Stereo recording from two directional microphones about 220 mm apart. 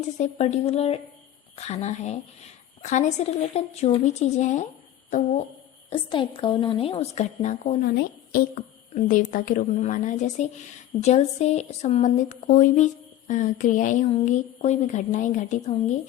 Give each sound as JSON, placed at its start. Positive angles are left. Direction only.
{"t": 0.2, "sound": "a woman's voice", "side_deg": 30}
{"t": 5.9, "sound": "a woman's voice", "side_deg": 25}